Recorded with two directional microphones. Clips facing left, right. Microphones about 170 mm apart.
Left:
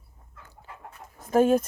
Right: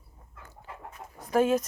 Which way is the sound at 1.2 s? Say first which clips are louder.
Left 4 dB; 50° left (ahead or behind).